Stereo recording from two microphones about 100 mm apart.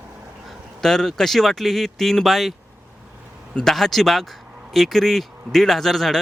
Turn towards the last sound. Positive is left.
turn(degrees=5)  # may be behind; listen again after turning